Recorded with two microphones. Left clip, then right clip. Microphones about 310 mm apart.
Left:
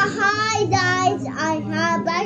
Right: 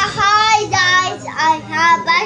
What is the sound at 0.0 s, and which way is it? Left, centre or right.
Child singing, centre.